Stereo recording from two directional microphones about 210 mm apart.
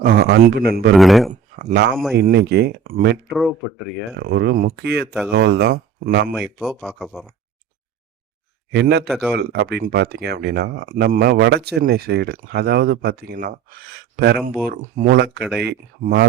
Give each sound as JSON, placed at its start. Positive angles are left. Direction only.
{"t": 0.0, "sound": "speech", "side_deg": -45}
{"t": 0.9, "sound": "speech", "side_deg": 0}
{"t": 1.3, "sound": "a sound", "side_deg": -35}
{"t": 2.1, "sound": "speech", "side_deg": -50}
{"t": 3.2, "sound": "speech", "side_deg": 0}
{"t": 4.2, "sound": "speech", "side_deg": -50}
{"t": 6.3, "sound": "speech", "side_deg": 0}
{"t": 8.7, "sound": "speech", "side_deg": -50}
{"t": 9.0, "sound": "speech", "side_deg": 0}
{"t": 9.3, "sound": "speech", "side_deg": -50}
{"t": 15.4, "sound": "speech", "side_deg": 0}
{"t": 15.6, "sound": "speech", "side_deg": -50}